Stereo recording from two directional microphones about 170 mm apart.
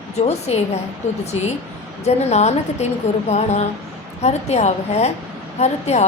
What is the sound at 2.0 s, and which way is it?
A woman's voice, 40° left (ahead or behind).